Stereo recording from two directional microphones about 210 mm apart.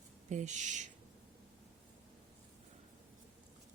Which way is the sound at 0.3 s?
35° right (ahead or behind).